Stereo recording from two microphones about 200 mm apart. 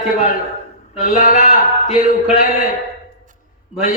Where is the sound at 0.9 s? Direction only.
35° left (ahead or behind).